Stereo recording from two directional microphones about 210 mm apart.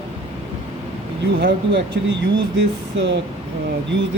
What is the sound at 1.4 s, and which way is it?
Speech, 50° right (ahead or behind).